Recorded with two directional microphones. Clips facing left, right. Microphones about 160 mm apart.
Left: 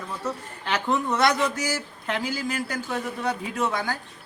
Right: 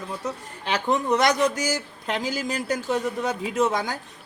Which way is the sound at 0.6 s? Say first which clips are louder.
Right 2 dB; 15° right (ahead or behind).